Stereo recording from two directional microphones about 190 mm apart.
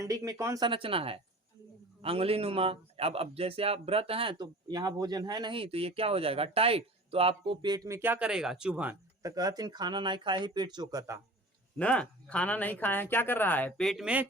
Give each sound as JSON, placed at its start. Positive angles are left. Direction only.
{"t": 0.0, "sound": "speech", "side_deg": -15}
{"t": 9.3, "sound": "speech", "side_deg": -20}
{"t": 11.8, "sound": "speech", "side_deg": 5}